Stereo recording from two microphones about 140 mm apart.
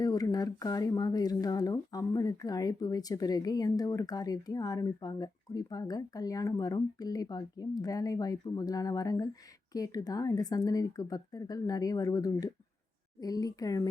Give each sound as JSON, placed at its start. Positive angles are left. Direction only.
{"t": 0.0, "sound": "speech", "side_deg": 25}